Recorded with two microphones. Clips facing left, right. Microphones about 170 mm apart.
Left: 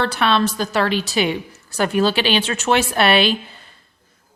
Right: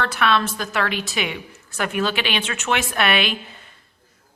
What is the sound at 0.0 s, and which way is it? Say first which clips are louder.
A woman's voice: left 3 dB; 30° left (ahead or behind).